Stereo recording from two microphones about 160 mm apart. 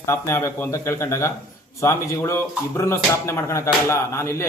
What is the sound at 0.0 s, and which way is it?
Speech, 15° left (ahead or behind).